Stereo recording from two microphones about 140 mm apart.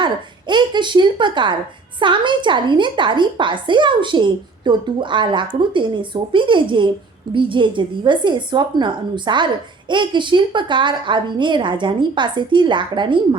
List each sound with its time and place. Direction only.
0.0 s a woman's voice: 35° right (ahead or behind)